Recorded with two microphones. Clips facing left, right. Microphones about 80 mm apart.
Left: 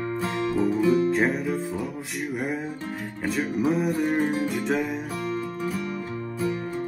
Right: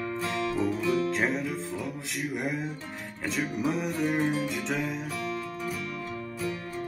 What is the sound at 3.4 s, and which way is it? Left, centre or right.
Music, centre.